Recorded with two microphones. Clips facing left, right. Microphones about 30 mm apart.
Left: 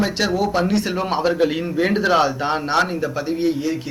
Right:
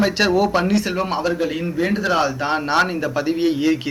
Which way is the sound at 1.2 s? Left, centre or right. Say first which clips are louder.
Left 2 dB; left.